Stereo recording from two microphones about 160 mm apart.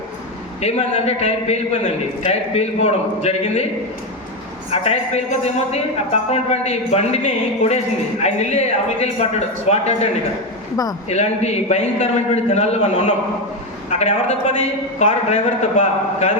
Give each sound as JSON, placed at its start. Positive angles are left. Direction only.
{"t": 0.6, "sound": "a man's voice", "side_deg": 45}
{"t": 4.7, "sound": "a woman's voice", "side_deg": 40}
{"t": 10.8, "sound": "a man's voice", "side_deg": 20}
{"t": 11.1, "sound": "a man's voice", "side_deg": 45}